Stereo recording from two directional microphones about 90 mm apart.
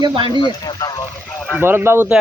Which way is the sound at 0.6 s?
45° left (ahead or behind).